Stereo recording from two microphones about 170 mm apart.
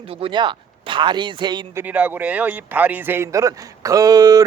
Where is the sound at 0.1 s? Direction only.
30° right (ahead or behind).